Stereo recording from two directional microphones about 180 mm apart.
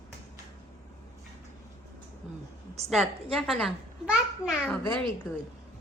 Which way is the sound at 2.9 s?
Centre (ahead or behind).